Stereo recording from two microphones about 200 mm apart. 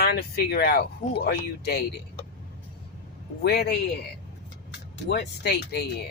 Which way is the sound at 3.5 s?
55° left (ahead or behind).